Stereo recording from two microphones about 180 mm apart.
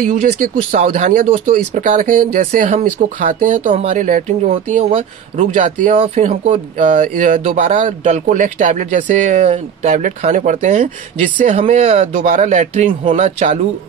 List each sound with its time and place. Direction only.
0.1 s speech: 40° right (ahead or behind)
5.4 s speech: 45° right (ahead or behind)